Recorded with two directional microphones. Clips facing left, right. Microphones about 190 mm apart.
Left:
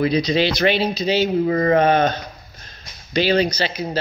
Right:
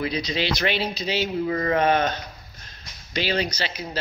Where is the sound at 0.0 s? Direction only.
35° left (ahead or behind).